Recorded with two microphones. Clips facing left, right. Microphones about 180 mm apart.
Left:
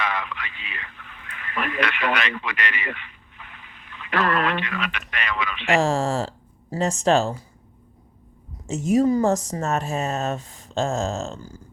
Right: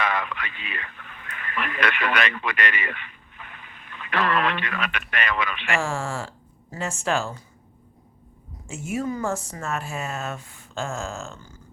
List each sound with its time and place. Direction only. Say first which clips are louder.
0.0 s radio: right 2 dB; 50° right (ahead or behind)
4.2 s speech: left 1 dB; 45° left (ahead or behind)
4.6 s speech: even; 50° right (ahead or behind)
5.7 s speech: left 7 dB; 40° left (ahead or behind)
8.6 s a woman's voice: left 9 dB; 35° left (ahead or behind)